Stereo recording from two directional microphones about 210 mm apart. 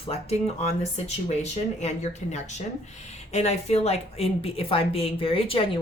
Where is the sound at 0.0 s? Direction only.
30° left (ahead or behind).